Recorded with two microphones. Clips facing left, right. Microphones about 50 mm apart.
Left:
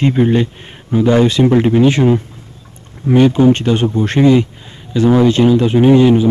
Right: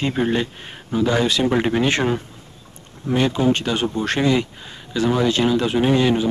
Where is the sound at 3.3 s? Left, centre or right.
Left.